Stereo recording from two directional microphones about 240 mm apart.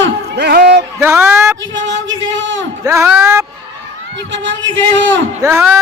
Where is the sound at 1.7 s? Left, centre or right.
Right.